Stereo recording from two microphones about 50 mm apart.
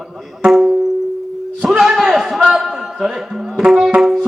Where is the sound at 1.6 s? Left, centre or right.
Centre.